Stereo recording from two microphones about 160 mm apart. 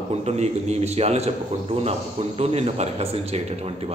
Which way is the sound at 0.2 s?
45° right (ahead or behind).